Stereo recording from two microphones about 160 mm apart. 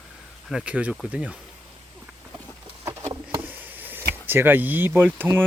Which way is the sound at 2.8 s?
15° right (ahead or behind).